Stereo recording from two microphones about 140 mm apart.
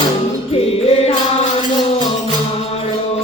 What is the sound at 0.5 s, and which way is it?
Music, 45° left (ahead or behind).